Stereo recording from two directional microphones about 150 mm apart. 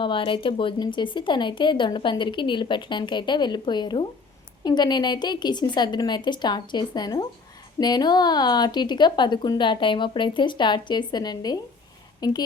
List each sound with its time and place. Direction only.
0.0 s speech: 35° left (ahead or behind)